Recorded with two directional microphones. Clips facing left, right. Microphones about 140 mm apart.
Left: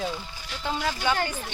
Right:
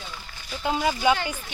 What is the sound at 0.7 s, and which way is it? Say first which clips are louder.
Speech: right 5 dB; 15° right (ahead or behind).